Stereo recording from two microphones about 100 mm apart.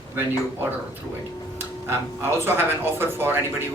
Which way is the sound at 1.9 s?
25° right (ahead or behind).